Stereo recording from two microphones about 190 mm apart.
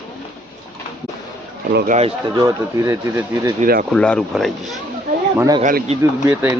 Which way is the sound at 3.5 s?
45° right (ahead or behind).